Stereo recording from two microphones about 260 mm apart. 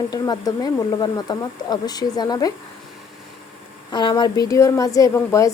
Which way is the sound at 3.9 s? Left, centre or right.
Centre.